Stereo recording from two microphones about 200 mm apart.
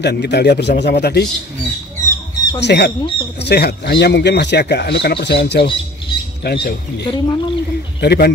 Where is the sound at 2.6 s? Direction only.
60° left (ahead or behind).